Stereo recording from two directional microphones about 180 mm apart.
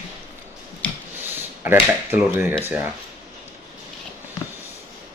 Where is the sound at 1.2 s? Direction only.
10° right (ahead or behind).